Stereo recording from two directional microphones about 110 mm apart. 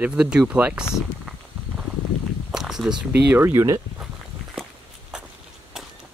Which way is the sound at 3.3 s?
25° right (ahead or behind).